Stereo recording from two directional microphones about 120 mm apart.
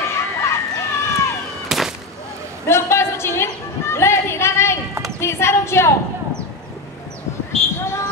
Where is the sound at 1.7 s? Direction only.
Centre (ahead or behind).